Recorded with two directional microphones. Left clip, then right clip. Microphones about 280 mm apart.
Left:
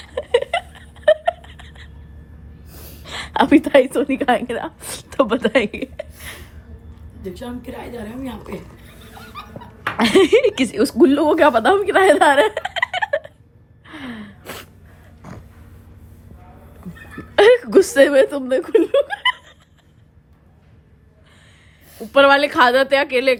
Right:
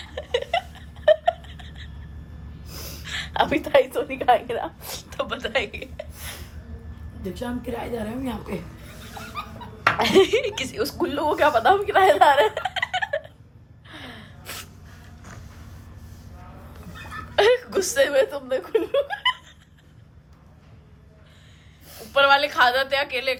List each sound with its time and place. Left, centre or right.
0.0 s a sound: left
3.0 s a woman's voice: left
7.2 s a woman's voice: centre
10.0 s a woman's voice: left
13.8 s gasp: left
15.2 s vehicle: left
17.3 s chuckle: left
22.1 s a woman's voice: left